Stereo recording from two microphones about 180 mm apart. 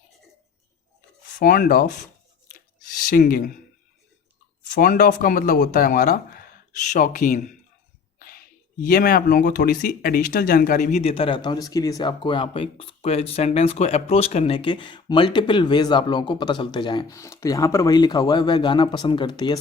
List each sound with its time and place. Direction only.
1.4 s speech: 50° left (ahead or behind)
3.1 s speech: 50° left (ahead or behind)
4.7 s speech: 50° left (ahead or behind)
8.8 s speech: 55° left (ahead or behind); by 19.5 s 25° left (ahead or behind)